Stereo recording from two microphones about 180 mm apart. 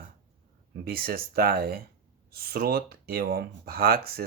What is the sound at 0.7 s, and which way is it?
Speech, 55° right (ahead or behind).